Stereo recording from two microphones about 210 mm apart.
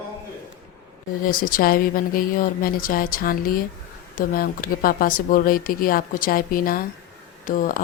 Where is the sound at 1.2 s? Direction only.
40° left (ahead or behind).